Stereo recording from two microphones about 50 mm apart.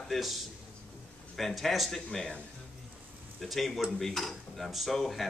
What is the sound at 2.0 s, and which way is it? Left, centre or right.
Speech, centre.